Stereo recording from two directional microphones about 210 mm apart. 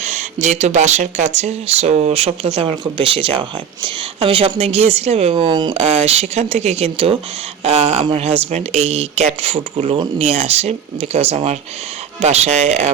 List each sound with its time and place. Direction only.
0.0 s a woman's voice: 35° right (ahead or behind)